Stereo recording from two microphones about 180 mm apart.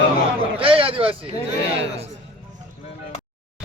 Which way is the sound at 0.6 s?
30° right (ahead or behind).